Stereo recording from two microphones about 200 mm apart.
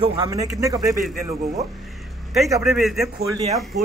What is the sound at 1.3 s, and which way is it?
Speech, 35° right (ahead or behind).